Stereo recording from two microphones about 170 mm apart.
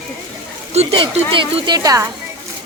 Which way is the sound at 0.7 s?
40° right (ahead or behind).